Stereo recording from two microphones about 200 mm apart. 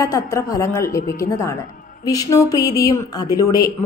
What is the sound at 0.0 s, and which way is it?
A woman's voice, 15° left (ahead or behind).